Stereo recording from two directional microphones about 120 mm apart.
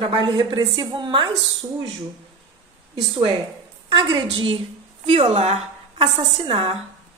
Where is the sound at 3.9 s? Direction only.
40° right (ahead or behind).